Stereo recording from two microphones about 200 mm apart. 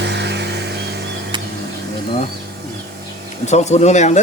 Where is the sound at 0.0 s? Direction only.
60° right (ahead or behind).